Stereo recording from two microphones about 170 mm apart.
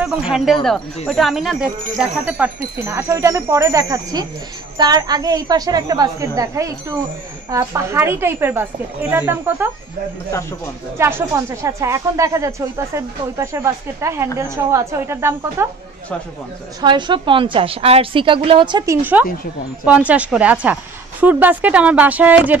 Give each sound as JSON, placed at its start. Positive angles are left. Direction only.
{"t": 0.0, "sound": "a woman's voice", "side_deg": -5}
{"t": 11.0, "sound": "speech", "side_deg": -15}
{"t": 16.8, "sound": "a woman's voice", "side_deg": -30}
{"t": 19.2, "sound": "speech", "side_deg": -10}